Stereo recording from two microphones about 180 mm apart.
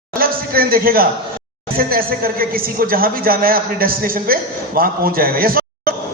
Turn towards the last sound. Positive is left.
turn(degrees=-55)  # may be behind; listen again after turning